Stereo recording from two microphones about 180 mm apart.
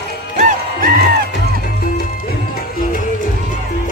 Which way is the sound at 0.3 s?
45° right (ahead or behind).